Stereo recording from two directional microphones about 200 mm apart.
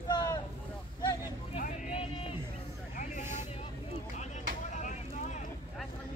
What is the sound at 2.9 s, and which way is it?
Vehicle, 40° left (ahead or behind).